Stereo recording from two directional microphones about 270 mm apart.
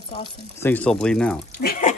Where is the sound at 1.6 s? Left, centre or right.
Left.